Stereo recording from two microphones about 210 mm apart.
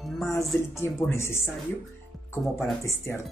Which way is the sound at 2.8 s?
15° left (ahead or behind).